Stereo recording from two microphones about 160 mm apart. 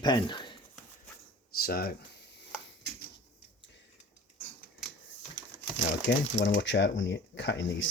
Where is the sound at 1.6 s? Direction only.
70° left (ahead or behind).